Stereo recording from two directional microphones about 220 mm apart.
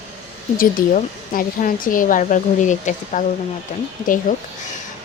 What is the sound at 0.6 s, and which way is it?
A woman's voice, 40° left (ahead or behind).